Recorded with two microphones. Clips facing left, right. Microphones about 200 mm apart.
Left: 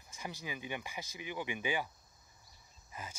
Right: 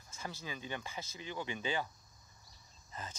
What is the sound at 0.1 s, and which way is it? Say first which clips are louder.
Speech: left 1 dB; 15° left (ahead or behind).